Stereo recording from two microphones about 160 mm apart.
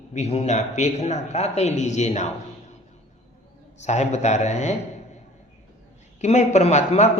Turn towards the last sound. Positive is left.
turn(degrees=45)  # may be behind; listen again after turning